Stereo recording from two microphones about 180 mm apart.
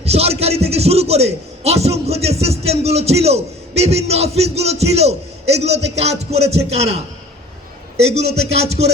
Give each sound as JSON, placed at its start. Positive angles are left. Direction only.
{"t": 0.0, "sound": "a man's voice", "side_deg": -35}
{"t": 8.1, "sound": "a man's voice", "side_deg": -35}